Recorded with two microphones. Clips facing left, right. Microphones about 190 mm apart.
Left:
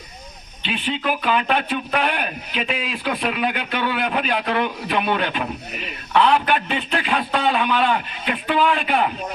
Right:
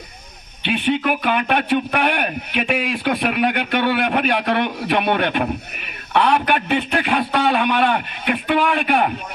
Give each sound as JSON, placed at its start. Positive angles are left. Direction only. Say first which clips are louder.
{"t": 0.6, "sound": "speech", "louder": "right 5 dB", "side_deg": -60}